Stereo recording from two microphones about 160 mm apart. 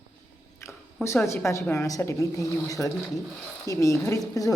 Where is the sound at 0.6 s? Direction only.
15° left (ahead or behind).